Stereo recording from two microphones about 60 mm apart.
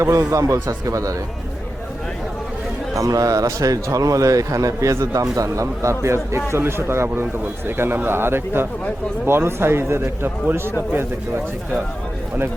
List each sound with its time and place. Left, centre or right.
0.0 s a man's voice: right
2.9 s a man's voice: right